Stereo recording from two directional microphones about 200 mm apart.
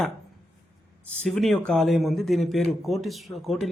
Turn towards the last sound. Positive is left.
turn(degrees=0)  # may be behind; listen again after turning